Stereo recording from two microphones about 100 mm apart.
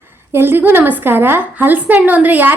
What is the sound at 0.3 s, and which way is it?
A woman's voice, 20° right (ahead or behind).